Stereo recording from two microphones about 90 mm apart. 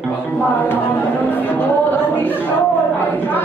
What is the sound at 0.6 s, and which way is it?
Speech, 20° left (ahead or behind).